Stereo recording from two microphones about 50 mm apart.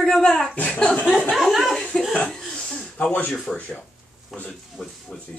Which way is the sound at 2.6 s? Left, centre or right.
Left.